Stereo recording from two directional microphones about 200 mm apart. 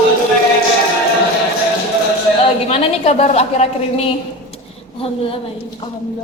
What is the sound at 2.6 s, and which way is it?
A woman's voice, 30° left (ahead or behind).